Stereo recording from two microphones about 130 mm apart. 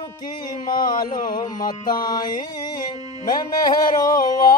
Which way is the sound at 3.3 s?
30° left (ahead or behind).